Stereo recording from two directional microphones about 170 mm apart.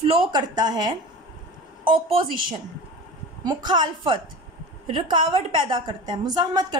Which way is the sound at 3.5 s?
25° right (ahead or behind).